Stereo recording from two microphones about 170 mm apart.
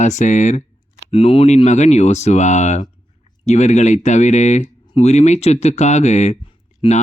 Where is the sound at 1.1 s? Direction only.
35° left (ahead or behind).